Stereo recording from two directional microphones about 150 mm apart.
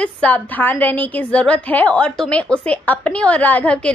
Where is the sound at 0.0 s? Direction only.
10° left (ahead or behind).